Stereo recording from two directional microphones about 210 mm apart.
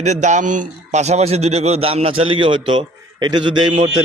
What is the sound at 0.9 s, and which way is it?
Speech, 30° right (ahead or behind).